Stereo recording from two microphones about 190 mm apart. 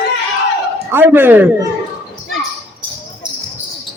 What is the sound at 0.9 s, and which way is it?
Speech, 10° right (ahead or behind).